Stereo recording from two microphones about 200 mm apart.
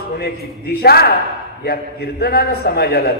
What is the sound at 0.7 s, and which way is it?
A man's voice, 50° left (ahead or behind).